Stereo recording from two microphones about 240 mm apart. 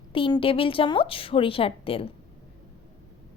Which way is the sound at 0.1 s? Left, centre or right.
Left.